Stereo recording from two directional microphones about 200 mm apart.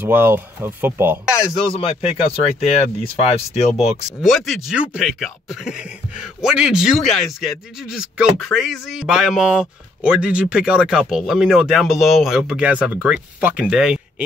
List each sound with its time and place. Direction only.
0.0 s speech: 10° right (ahead or behind)
1.3 s speech: 15° left (ahead or behind)
2.6 s speech: 30° left (ahead or behind)
4.2 s speech: centre (ahead or behind)